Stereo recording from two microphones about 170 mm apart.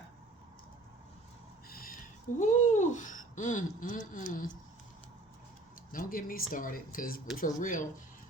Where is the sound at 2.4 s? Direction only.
45° left (ahead or behind).